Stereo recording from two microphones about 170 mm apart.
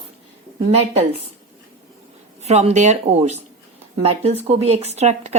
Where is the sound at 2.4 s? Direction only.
40° right (ahead or behind).